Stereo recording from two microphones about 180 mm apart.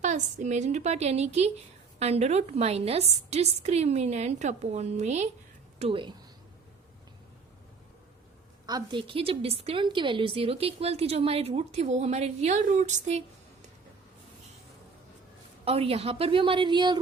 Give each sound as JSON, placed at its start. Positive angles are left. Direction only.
{"t": 0.0, "sound": "a woman's voice", "side_deg": -40}
{"t": 5.8, "sound": "a woman's voice", "side_deg": -30}
{"t": 8.6, "sound": "a woman's voice", "side_deg": -25}
{"t": 15.6, "sound": "a woman's voice", "side_deg": -35}